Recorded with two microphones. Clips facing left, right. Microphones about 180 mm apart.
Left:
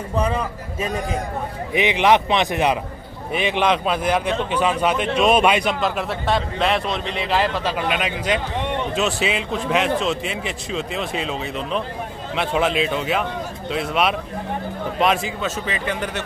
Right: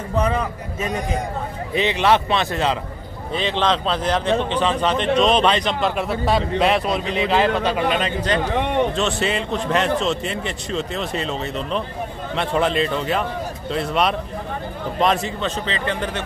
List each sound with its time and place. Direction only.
1.7 s a man's voice: 15° left (ahead or behind)